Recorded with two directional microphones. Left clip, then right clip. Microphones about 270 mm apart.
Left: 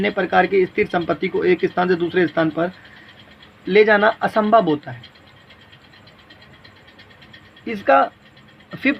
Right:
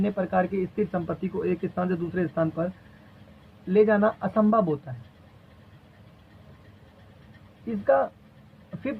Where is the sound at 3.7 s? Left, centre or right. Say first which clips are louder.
Left 7 dB; left.